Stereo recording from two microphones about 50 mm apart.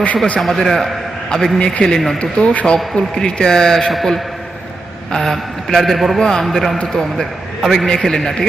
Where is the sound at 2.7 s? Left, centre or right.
Centre.